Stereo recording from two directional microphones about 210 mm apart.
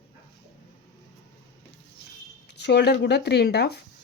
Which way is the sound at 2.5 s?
55° left (ahead or behind).